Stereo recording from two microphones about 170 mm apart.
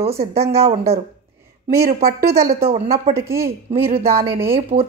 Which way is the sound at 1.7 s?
60° right (ahead or behind).